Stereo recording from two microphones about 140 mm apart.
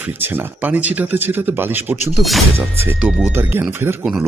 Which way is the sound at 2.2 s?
Centre (ahead or behind).